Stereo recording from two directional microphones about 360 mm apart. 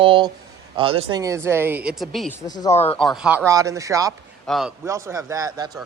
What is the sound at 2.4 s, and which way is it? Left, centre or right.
Speech, centre.